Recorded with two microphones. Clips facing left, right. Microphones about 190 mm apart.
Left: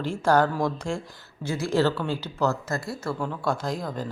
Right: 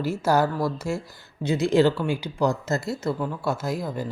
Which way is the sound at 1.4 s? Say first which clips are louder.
Right 4 dB; 20° right (ahead or behind).